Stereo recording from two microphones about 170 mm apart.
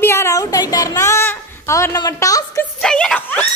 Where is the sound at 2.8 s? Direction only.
5° left (ahead or behind).